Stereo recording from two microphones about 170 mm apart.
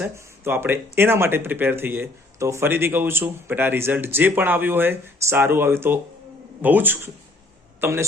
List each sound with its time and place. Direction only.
0.0 s a man's voice: 15° right (ahead or behind)